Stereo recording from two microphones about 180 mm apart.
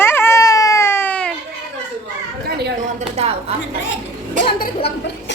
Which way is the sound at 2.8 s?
35° right (ahead or behind).